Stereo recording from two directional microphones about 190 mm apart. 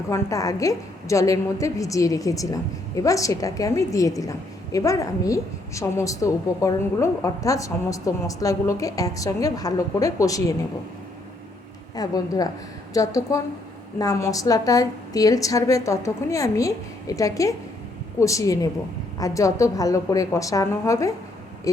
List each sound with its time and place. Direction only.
0.1 s a woman's voice: 15° left (ahead or behind)
11.9 s a woman's voice: 20° left (ahead or behind)